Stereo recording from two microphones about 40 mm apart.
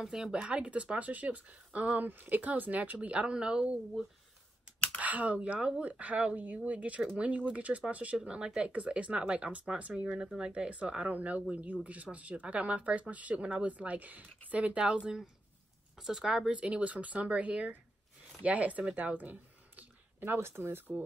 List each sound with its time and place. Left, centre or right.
0.0 s speech: centre
0.4 s speech: right
2.0 s speech: right
4.9 s speech: right
8.3 s speech: right
10.0 s speech: right
11.1 s speech: right
16.0 s speech: centre
16.4 s speech: right
20.2 s speech: right